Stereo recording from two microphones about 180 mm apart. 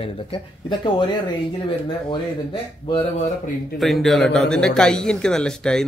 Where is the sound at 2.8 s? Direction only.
30° left (ahead or behind).